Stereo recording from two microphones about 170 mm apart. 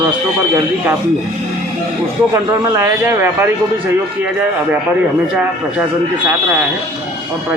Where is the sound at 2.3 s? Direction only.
15° right (ahead or behind).